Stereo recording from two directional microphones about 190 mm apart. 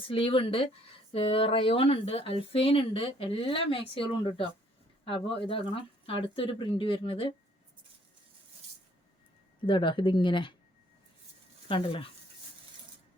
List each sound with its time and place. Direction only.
0.1 s speech: 30° left (ahead or behind)
9.6 s speech: 25° left (ahead or behind)
11.7 s speech: 25° left (ahead or behind)